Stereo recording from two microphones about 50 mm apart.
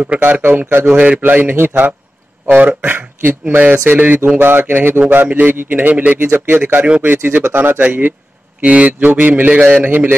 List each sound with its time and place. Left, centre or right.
0.2 s a man's voice: right
0.8 s a man's voice: right
1.2 s a man's voice: right